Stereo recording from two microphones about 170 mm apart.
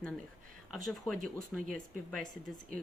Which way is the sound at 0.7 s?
Centre (ahead or behind).